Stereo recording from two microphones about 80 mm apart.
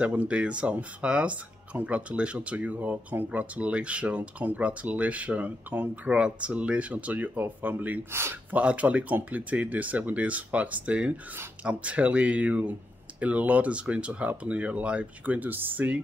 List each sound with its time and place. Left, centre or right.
0.0 s speech: centre
8.1 s speech: right
8.5 s speech: centre